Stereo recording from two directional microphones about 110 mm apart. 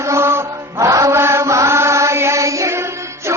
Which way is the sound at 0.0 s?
25° right (ahead or behind).